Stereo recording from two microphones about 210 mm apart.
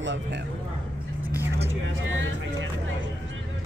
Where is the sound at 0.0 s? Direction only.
60° right (ahead or behind).